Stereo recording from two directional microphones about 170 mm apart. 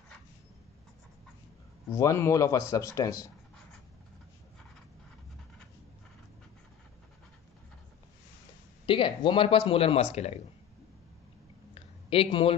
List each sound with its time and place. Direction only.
1.9 s speech: 15° left (ahead or behind)
8.8 s speech: 30° left (ahead or behind)
11.7 s a sound: 35° left (ahead or behind)